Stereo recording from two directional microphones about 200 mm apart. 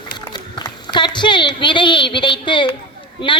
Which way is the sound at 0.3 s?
20° left (ahead or behind).